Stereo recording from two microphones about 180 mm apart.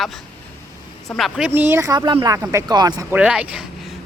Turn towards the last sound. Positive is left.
turn(degrees=-5)  # may be behind; listen again after turning